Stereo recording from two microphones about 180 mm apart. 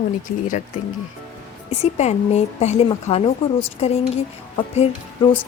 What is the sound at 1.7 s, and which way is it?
Speech, 40° left (ahead or behind).